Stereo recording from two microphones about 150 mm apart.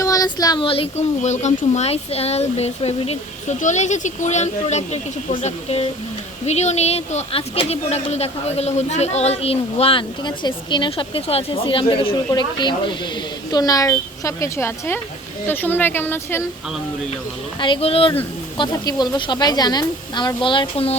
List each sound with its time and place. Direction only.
0.0 s a sound: 25° left (ahead or behind)
0.7 s a woman's voice: 45° left (ahead or behind); by 16.5 s 15° left (ahead or behind)
17.6 s speech: 35° left (ahead or behind)
18.5 s speech: 30° left (ahead or behind)